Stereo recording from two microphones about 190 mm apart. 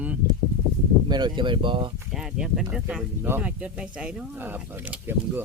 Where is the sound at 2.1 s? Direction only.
5° right (ahead or behind).